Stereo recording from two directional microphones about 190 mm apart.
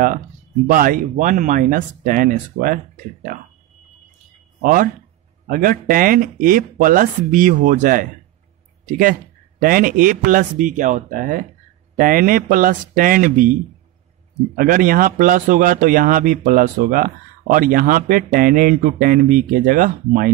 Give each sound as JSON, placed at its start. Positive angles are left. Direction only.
{"t": 0.7, "sound": "speech", "side_deg": -50}
{"t": 4.6, "sound": "speech", "side_deg": -45}